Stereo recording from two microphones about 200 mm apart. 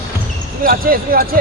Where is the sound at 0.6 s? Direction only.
45° right (ahead or behind).